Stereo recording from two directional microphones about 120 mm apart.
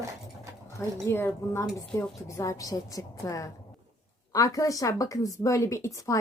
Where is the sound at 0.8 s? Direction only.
20° left (ahead or behind).